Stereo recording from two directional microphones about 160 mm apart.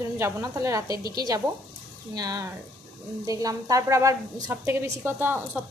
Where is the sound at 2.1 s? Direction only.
25° right (ahead or behind).